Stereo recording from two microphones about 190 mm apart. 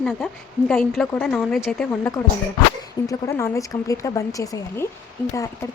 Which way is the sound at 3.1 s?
15° left (ahead or behind).